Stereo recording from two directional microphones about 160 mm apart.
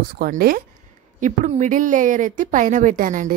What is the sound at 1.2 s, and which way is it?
Speech, 50° right (ahead or behind).